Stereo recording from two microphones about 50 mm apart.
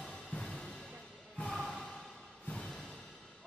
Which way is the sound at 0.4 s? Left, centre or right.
Centre.